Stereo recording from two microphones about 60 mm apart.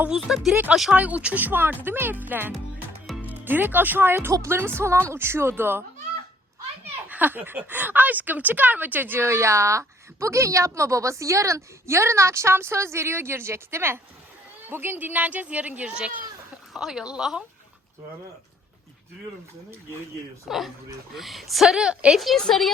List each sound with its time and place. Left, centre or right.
0.1 s a woman's voice: centre
0.9 s a woman's voice: right
7.1 s speech: right
9.2 s a woman's voice: right; by 17.4 s centre
20.5 s a woman's voice: centre
22.4 s a woman's voice: centre